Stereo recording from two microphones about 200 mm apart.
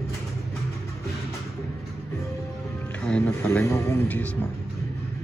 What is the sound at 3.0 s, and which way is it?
Speech, 10° left (ahead or behind).